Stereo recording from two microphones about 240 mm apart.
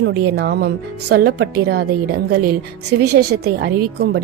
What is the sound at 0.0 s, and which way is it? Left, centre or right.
Speech, right.